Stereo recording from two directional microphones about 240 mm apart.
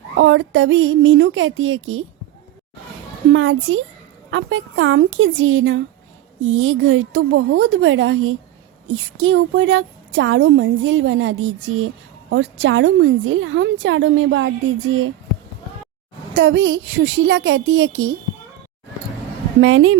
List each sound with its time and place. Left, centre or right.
0.2 s a woman's voice: right
3.3 s a woman's voice: right
16.3 s a woman's voice: right
19.6 s a woman's voice: right